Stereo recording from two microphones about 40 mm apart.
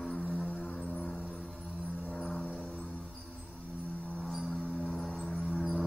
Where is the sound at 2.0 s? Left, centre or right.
Left.